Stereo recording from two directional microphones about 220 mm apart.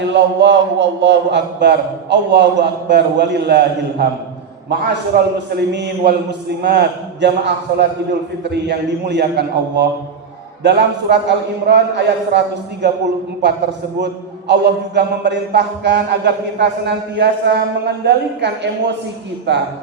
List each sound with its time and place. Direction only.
0.1 s a man's voice: 55° right (ahead or behind)
14.0 s a man's voice: 50° right (ahead or behind)